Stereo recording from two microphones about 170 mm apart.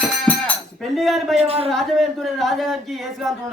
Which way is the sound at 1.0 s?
Centre (ahead or behind).